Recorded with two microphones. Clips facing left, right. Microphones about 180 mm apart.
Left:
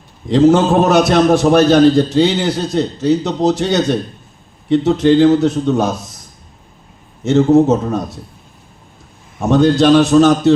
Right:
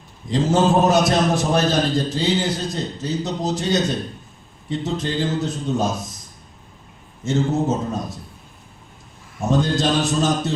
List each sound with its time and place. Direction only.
0.3 s a man's voice: 70° left (ahead or behind)
7.3 s a man's voice: 70° left (ahead or behind)
9.4 s a man's voice: 70° left (ahead or behind)